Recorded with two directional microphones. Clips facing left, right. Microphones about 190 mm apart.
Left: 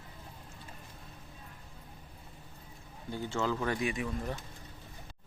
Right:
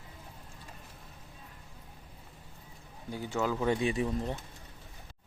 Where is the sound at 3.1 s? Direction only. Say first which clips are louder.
Right 1 dB; 10° right (ahead or behind).